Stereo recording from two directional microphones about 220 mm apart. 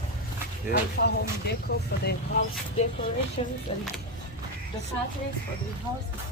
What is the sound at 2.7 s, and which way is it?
Speech, 30° left (ahead or behind).